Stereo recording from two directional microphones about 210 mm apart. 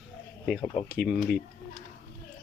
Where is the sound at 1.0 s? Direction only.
Centre (ahead or behind).